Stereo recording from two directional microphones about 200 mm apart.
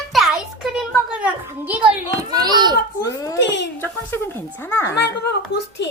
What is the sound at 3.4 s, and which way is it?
Speech, 65° left (ahead or behind).